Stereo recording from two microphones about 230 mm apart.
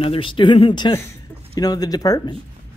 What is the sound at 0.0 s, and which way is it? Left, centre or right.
Speech, left.